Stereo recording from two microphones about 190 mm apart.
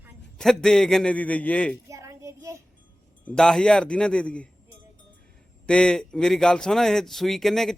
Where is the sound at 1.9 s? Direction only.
15° right (ahead or behind).